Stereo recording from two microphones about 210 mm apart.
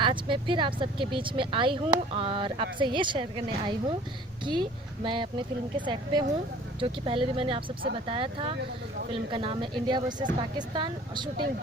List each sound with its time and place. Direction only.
0.0 s speech: 25° right (ahead or behind)
5.0 s speech: 20° right (ahead or behind)